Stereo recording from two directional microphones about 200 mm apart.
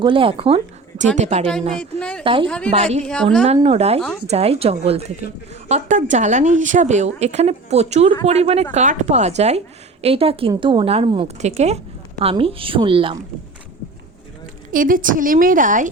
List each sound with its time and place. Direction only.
0.0 s speech: 25° right (ahead or behind)
1.8 s a woman's voice: 5° left (ahead or behind)
2.2 s a woman's voice: 25° right (ahead or behind)
3.0 s a woman's voice: 5° left (ahead or behind)
3.4 s a woman's voice: 30° right (ahead or behind)
14.7 s a woman's voice: 45° right (ahead or behind)